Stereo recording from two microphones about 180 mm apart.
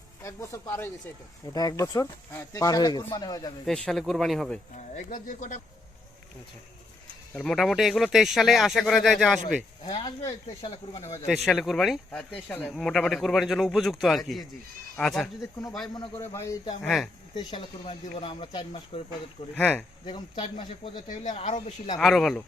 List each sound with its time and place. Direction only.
0.2 s speech: 15° left (ahead or behind)
3.7 s speech: centre (ahead or behind)
4.7 s speech: 45° left (ahead or behind)
7.3 s speech: 5° left (ahead or behind)
9.8 s speech: 30° left (ahead or behind)
11.4 s speech: centre (ahead or behind)
15.9 s speech: 25° left (ahead or behind)
16.8 s speech: centre (ahead or behind)
17.3 s speech: 30° left (ahead or behind)
19.5 s speech: 5° left (ahead or behind)
20.1 s speech: 25° left (ahead or behind)
21.1 s speech: 40° left (ahead or behind)
21.9 s speech: centre (ahead or behind)